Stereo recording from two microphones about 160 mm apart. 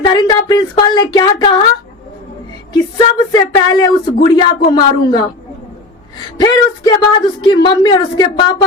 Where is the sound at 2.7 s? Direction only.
25° left (ahead or behind).